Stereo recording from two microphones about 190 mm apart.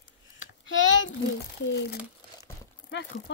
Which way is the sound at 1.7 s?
65° left (ahead or behind).